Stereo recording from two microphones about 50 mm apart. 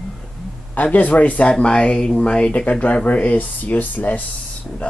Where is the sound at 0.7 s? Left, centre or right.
Left.